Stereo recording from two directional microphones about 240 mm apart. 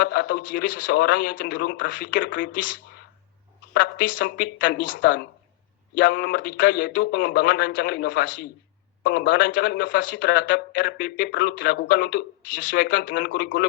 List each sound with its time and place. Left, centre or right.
0.0 s a man's voice: left
4.5 s a man's voice: left
9.5 s a man's voice: left